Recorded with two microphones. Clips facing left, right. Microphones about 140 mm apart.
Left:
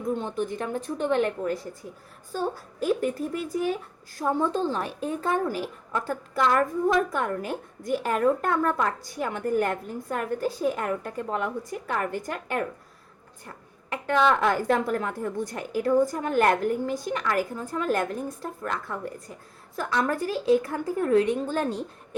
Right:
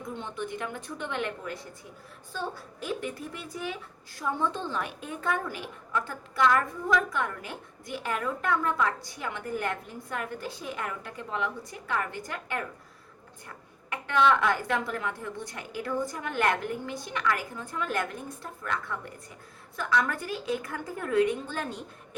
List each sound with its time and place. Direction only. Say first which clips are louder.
0.1 s a woman's voice: left 7 dB; 40° left (ahead or behind)
13.9 s a woman's voice: left 2 dB; 40° left (ahead or behind)
20.1 s a woman's voice: left 9 dB; 35° left (ahead or behind)